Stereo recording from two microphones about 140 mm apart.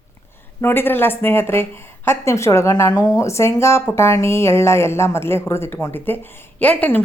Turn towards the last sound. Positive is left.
turn(degrees=10)  # may be behind; listen again after turning